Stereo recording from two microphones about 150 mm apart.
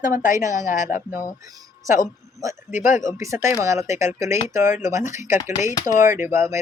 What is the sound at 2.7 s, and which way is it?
Speech, 55° left (ahead or behind).